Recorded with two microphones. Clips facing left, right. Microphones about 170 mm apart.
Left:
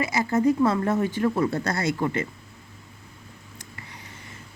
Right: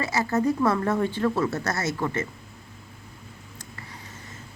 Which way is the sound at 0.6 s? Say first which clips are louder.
Left 1 dB; 30° left (ahead or behind).